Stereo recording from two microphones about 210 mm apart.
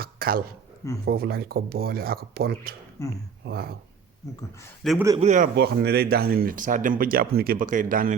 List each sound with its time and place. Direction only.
0.0 s a sound: 45° right (ahead or behind)
1.0 s speech: 45° right (ahead or behind)
3.0 s speech: 15° left (ahead or behind)
3.4 s speech: 50° right (ahead or behind)
4.8 s a man's voice: centre (ahead or behind)
5.2 s a man's voice: 35° right (ahead or behind)
5.5 s speech: 50° right (ahead or behind)